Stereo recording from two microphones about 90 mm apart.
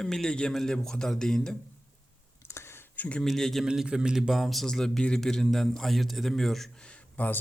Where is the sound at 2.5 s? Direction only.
30° left (ahead or behind).